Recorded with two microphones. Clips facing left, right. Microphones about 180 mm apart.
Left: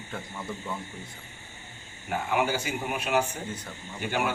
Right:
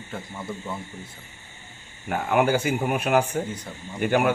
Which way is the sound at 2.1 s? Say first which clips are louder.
Right 6 dB; 55° right (ahead or behind).